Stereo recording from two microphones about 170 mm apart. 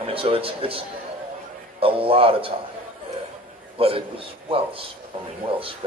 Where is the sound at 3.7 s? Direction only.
35° right (ahead or behind).